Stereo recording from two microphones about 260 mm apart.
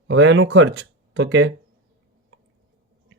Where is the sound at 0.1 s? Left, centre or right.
Right.